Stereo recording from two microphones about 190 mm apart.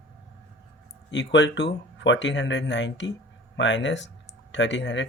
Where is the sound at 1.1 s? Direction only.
70° left (ahead or behind).